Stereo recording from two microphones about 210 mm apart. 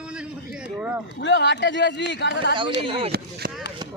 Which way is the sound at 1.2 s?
60° left (ahead or behind).